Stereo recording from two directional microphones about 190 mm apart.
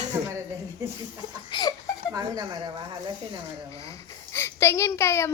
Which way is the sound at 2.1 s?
20° right (ahead or behind).